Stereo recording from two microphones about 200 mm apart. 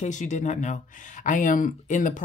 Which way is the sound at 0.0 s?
40° left (ahead or behind).